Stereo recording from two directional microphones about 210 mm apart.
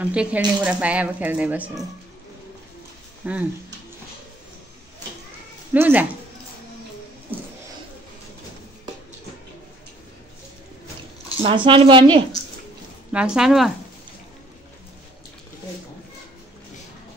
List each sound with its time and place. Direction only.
0.0 s speech: 5° right (ahead or behind)
3.2 s speech: 10° right (ahead or behind)
5.7 s speech: 10° right (ahead or behind)
11.2 s a woman's voice: 25° right (ahead or behind)
13.1 s speech: 5° right (ahead or behind)